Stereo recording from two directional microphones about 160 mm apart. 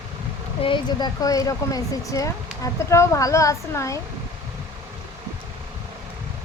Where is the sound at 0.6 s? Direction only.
30° left (ahead or behind).